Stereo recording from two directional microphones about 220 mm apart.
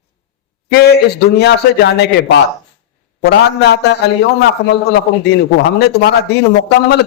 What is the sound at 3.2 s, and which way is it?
Speech, 50° left (ahead or behind).